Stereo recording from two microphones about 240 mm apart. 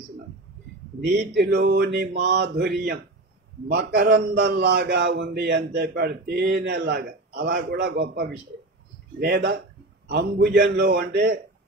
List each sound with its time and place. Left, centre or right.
1.4 s a man's voice: right